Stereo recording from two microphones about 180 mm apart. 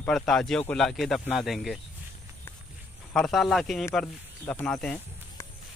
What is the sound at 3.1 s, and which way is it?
Speech, centre (ahead or behind).